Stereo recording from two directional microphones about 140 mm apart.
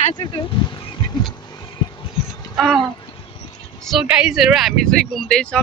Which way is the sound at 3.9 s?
5° right (ahead or behind).